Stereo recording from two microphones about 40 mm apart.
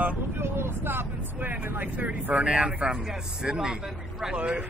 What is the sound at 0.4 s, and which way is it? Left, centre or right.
Speech, right.